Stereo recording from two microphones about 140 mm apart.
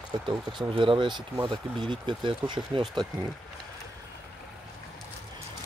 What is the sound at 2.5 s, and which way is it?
Speech, 35° right (ahead or behind).